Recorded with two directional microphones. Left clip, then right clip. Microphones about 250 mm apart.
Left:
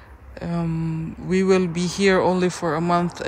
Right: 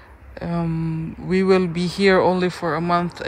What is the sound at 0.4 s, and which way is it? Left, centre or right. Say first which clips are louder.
Speech: right 2 dB; centre.